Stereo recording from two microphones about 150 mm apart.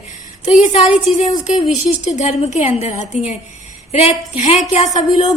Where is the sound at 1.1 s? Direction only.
55° left (ahead or behind).